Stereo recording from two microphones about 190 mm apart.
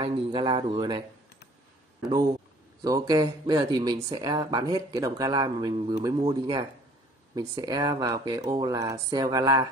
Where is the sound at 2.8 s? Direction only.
20° right (ahead or behind).